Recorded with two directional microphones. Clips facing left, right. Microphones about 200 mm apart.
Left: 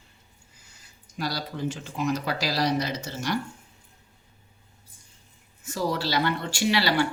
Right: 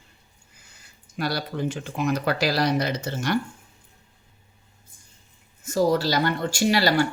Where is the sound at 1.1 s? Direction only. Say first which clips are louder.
Right 4 dB; 60° right (ahead or behind).